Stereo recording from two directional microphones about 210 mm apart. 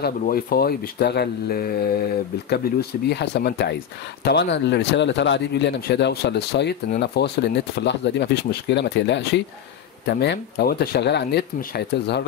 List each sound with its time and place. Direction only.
0.0 s speech: 45° left (ahead or behind)